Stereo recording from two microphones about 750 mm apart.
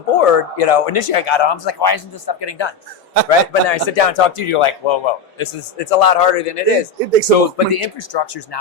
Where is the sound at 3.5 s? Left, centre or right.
Left.